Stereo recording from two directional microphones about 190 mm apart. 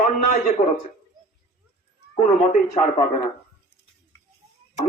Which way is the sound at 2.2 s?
35° left (ahead or behind).